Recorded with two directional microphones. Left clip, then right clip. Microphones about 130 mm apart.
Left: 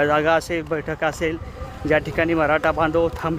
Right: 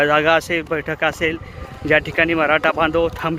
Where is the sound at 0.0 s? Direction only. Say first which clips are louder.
Right 3 dB; 15° right (ahead or behind).